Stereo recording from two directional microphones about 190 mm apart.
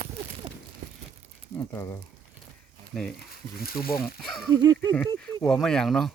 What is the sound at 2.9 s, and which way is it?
Speech, 5° left (ahead or behind).